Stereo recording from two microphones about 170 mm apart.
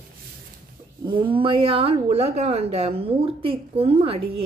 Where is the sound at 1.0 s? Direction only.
30° right (ahead or behind).